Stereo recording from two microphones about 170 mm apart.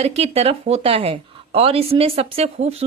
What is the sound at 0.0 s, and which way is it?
A woman's voice, 35° right (ahead or behind).